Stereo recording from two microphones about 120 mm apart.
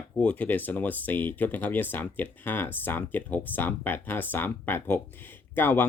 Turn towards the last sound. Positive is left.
turn(degrees=15)  # may be behind; listen again after turning